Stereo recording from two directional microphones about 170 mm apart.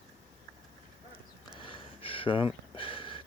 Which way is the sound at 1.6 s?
30° left (ahead or behind).